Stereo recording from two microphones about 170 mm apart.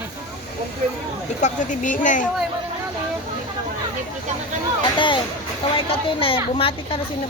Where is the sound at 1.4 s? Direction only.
50° left (ahead or behind).